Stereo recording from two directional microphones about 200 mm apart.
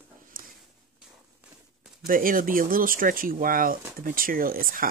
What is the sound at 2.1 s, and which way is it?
Speech, 45° right (ahead or behind).